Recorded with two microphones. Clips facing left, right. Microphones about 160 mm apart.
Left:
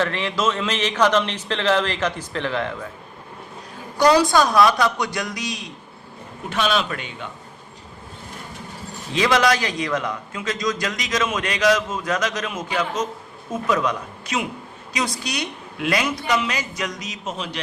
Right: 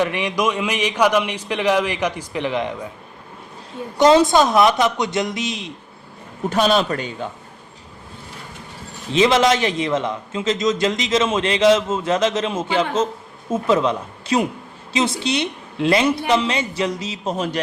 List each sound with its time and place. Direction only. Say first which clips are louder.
0.0 s a man's voice: right 2 dB; 15° right (ahead or behind)
3.9 s a man's voice: right 3 dB; 20° right (ahead or behind)
6.5 s a man's voice: right 5 dB; 40° right (ahead or behind)
9.1 s a man's voice: right 3 dB; 25° right (ahead or behind)
17.3 s speech: right 7 dB; 45° right (ahead or behind)